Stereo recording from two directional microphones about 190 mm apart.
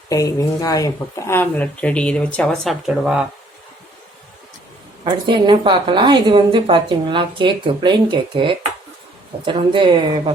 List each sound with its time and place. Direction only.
0.1 s speech: 20° left (ahead or behind); by 3.2 s 5° right (ahead or behind)
5.0 s a woman's voice: 25° right (ahead or behind)